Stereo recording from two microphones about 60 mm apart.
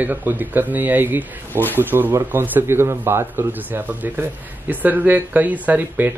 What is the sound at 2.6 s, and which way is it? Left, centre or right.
A man's voice, right.